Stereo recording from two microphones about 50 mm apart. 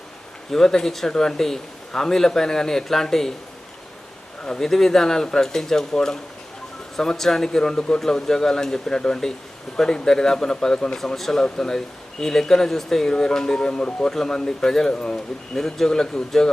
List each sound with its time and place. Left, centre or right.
0.5 s a man's voice: centre
4.4 s a man's voice: centre
15.5 s a man's voice: centre